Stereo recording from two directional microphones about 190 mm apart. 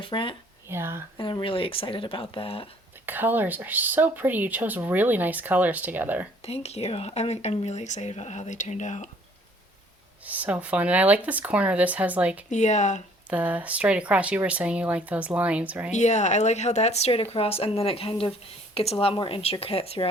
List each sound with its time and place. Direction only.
0.0 s speech: 25° left (ahead or behind)
0.7 s speech: 15° right (ahead or behind)
1.2 s speech: 25° left (ahead or behind)
3.1 s speech: 10° right (ahead or behind)
6.4 s speech: 35° left (ahead or behind)
10.2 s speech: 10° right (ahead or behind)
12.5 s speech: 40° left (ahead or behind)
13.3 s speech: 10° right (ahead or behind)
15.9 s speech: 40° left (ahead or behind)